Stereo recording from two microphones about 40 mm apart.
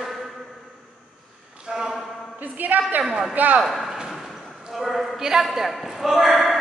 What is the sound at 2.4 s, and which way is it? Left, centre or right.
Speech, right.